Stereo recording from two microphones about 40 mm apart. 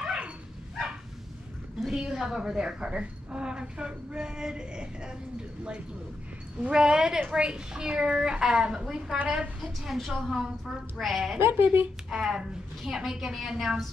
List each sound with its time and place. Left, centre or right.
0.0 s dog: right
1.8 s a sound: centre
2.0 s a woman's voice: centre
6.6 s a woman's voice: right
9.2 s a woman's voice: right
9.9 s a woman's voice: centre
11.3 s speech: right
12.1 s a woman's voice: centre